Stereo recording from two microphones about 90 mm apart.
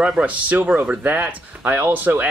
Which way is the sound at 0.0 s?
15° right (ahead or behind).